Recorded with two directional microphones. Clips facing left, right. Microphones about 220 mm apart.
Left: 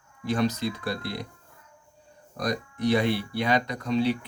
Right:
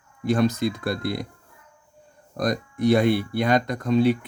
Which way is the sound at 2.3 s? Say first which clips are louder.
Right 4 dB; 50° right (ahead or behind).